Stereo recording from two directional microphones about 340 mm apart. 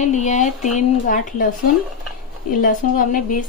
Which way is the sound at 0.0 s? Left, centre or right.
Left.